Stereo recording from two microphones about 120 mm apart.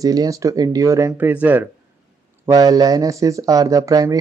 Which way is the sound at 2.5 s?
30° right (ahead or behind).